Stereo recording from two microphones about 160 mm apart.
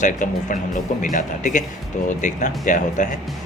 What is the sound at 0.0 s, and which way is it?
A man's voice, 55° left (ahead or behind).